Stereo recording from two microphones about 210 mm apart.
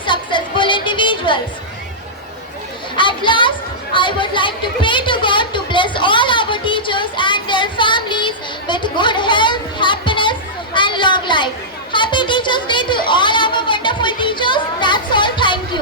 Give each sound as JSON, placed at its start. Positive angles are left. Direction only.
{"t": 0.0, "sound": "music", "side_deg": 20}
{"t": 2.9, "sound": "chatter", "side_deg": 25}
{"t": 3.9, "sound": "a sound", "side_deg": 25}